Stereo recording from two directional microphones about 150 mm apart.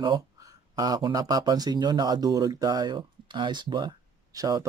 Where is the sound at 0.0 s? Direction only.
25° right (ahead or behind).